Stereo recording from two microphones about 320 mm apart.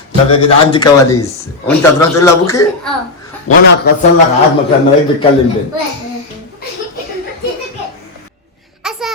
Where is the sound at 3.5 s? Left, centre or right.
Left.